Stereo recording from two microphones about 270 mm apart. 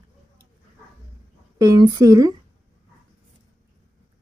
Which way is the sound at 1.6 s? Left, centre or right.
Centre.